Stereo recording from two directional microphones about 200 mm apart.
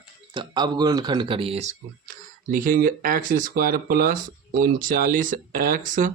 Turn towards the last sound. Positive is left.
turn(degrees=-40)  # may be behind; listen again after turning